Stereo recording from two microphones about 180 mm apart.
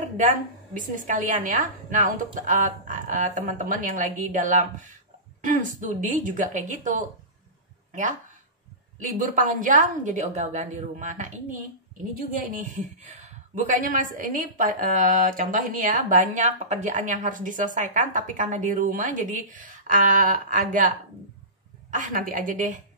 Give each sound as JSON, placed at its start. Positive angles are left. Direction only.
{"t": 0.7, "sound": "a woman's voice", "side_deg": -45}
{"t": 21.9, "sound": "a woman's voice", "side_deg": -50}